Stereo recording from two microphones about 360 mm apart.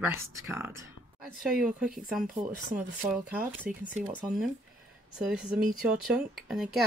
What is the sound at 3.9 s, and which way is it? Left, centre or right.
Speech, centre.